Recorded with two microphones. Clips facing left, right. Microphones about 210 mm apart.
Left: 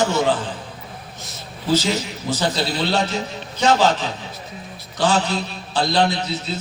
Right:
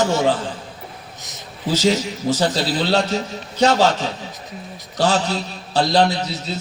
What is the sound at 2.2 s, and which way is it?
Speech, 45° right (ahead or behind).